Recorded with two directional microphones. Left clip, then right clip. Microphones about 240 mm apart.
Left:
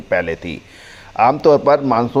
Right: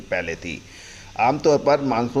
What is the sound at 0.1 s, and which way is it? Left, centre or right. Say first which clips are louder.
Speech: left 7 dB; centre.